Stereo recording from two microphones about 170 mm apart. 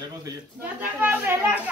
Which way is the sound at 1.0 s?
10° right (ahead or behind).